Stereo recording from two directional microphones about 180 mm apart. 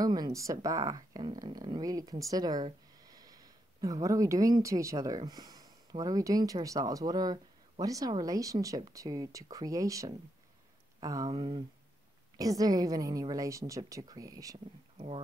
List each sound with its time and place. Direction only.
0.0 s speech: 20° right (ahead or behind)
15.0 s speech: 30° right (ahead or behind)